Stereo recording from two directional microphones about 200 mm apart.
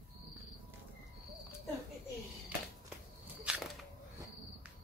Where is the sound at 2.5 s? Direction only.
5° right (ahead or behind).